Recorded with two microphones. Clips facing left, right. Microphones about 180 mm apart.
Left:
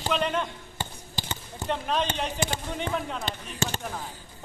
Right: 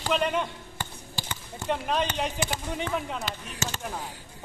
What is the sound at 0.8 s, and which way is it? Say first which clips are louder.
Basketball bounce: left 2 dB; 25° left (ahead or behind).